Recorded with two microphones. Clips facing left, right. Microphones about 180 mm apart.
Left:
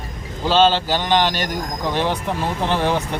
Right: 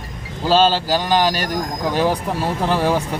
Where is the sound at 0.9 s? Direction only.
5° right (ahead or behind).